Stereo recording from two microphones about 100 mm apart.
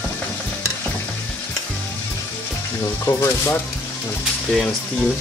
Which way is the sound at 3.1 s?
25° left (ahead or behind).